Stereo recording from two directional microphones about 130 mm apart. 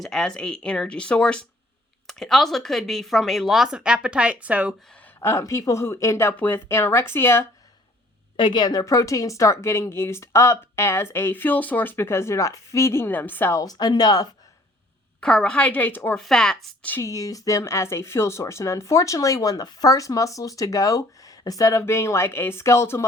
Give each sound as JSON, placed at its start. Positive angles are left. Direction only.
{"t": 0.0, "sound": "speech", "side_deg": 5}
{"t": 4.9, "sound": "speech", "side_deg": 10}
{"t": 8.4, "sound": "speech", "side_deg": 35}
{"t": 15.2, "sound": "speech", "side_deg": 5}
{"t": 16.1, "sound": "speech", "side_deg": 5}
{"t": 17.0, "sound": "speech", "side_deg": 25}